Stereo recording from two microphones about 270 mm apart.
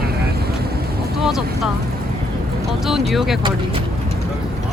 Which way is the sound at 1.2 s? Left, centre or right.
Centre.